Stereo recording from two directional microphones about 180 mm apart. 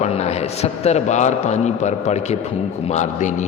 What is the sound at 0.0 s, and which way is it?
A man's voice, 35° left (ahead or behind).